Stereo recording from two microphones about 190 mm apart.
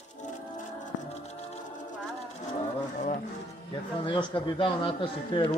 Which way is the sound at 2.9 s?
45° left (ahead or behind).